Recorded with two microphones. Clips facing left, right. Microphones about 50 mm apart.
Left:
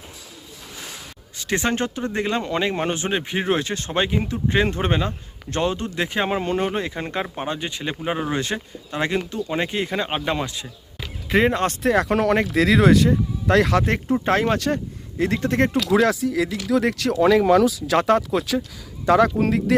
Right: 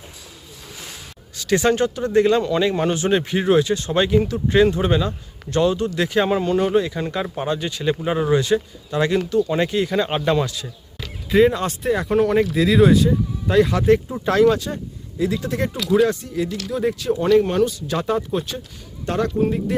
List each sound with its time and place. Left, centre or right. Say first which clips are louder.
1.4 s speech: right 5 dB; left
3.1 s speech: right 5 dB; centre
3.3 s speech: right 5 dB; left
10.1 s speech: right 4 dB; centre
11.3 s speech: right 3 dB; left
11.8 s speech: right 2 dB; left
13.7 s speech: right 3 dB; left
15.2 s speech: left 2 dB; left
15.9 s speech: even; left